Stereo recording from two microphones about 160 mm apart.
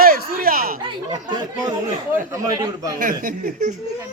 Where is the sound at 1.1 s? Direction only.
25° right (ahead or behind).